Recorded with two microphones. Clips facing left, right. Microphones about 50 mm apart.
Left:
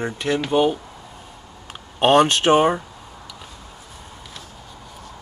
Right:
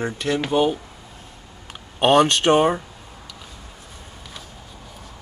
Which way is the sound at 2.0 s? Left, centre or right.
Centre.